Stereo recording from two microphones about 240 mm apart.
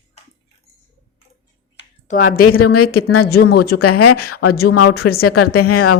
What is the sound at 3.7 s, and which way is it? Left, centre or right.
Speech, left.